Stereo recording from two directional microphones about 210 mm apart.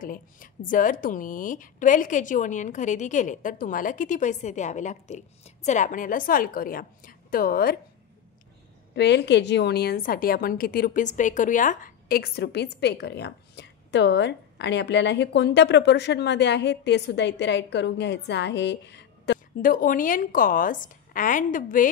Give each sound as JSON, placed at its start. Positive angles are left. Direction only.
{"t": 0.0, "sound": "speech", "side_deg": 40}
{"t": 8.9, "sound": "a woman's voice", "side_deg": 55}